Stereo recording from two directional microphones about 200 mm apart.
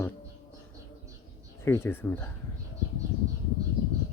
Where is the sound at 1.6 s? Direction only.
10° left (ahead or behind).